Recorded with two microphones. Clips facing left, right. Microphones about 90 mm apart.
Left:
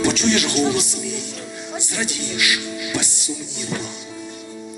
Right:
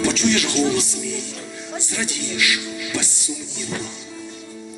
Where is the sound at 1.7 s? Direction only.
20° left (ahead or behind).